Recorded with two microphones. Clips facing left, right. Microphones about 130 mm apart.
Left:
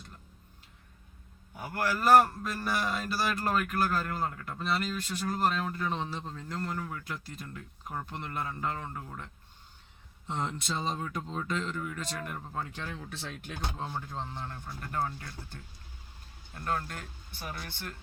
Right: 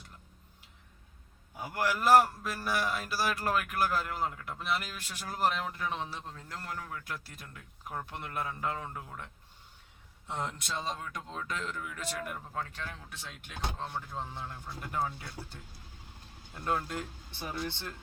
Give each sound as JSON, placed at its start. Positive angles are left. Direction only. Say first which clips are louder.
{"t": 1.6, "sound": "a man's voice", "louder": "left 1 dB", "side_deg": -15}
{"t": 13.7, "sound": "speech", "louder": "left 2 dB", "side_deg": 10}
{"t": 14.1, "sound": "a man's voice", "louder": "left 1 dB", "side_deg": -5}
{"t": 16.6, "sound": "speech", "louder": "right 1 dB", "side_deg": -15}